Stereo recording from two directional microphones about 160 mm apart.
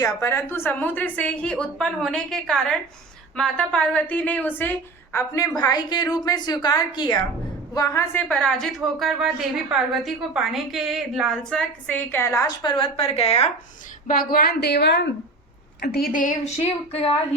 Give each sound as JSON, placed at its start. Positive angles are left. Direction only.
{"t": 0.0, "sound": "a woman's voice", "side_deg": 15}
{"t": 8.3, "sound": "a woman's voice", "side_deg": 5}
{"t": 14.1, "sound": "a woman's voice", "side_deg": 65}
{"t": 15.8, "sound": "a woman's voice", "side_deg": 70}
{"t": 16.6, "sound": "speech", "side_deg": 40}